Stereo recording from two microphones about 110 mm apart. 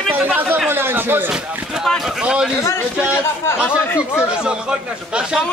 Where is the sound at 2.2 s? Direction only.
10° right (ahead or behind).